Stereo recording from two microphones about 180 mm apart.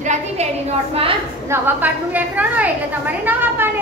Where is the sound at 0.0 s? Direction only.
40° right (ahead or behind).